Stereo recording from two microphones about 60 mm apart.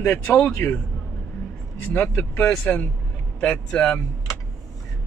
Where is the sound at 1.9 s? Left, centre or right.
Left.